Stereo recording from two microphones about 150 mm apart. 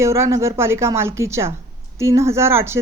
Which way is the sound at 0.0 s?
20° right (ahead or behind).